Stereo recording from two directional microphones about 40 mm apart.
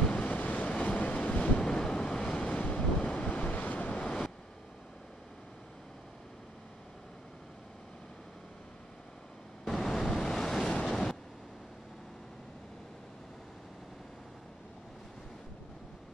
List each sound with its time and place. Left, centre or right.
0.1 s train: left
0.7 s train: left
1.6 s vehicle: centre
3.2 s waves: left
9.7 s waves: centre
10.6 s waves: centre